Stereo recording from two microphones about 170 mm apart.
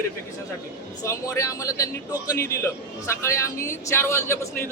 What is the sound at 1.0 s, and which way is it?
Speech, 20° left (ahead or behind).